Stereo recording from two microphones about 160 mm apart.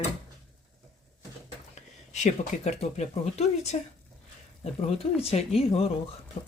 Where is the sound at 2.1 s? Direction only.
45° left (ahead or behind).